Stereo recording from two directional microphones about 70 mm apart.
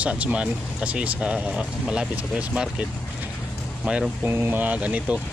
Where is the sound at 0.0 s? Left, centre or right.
Centre.